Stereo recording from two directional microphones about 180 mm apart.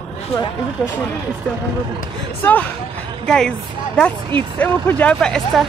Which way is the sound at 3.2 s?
5° left (ahead or behind).